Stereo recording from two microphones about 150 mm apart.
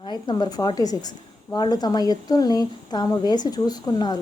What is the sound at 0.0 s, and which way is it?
A woman's voice, 30° left (ahead or behind).